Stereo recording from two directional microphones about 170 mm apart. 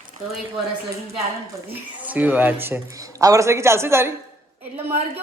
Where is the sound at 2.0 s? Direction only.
10° right (ahead or behind).